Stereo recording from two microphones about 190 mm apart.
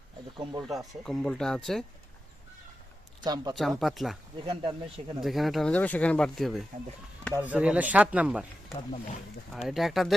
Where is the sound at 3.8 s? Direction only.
Centre (ahead or behind).